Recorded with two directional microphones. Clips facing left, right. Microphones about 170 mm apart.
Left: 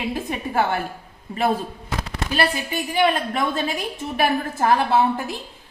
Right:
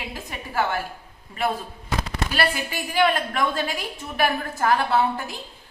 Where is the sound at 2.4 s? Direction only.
20° left (ahead or behind).